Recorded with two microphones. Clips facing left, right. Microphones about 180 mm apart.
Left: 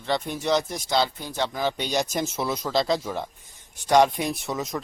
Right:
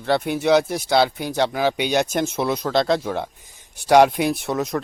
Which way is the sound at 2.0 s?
Centre (ahead or behind).